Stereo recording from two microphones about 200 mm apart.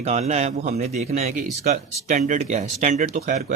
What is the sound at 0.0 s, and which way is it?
Speech, 35° right (ahead or behind).